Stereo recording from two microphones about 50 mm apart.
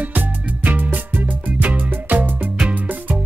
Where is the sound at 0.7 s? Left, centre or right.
Right.